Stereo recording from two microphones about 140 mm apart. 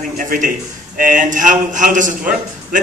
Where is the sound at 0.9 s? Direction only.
80° right.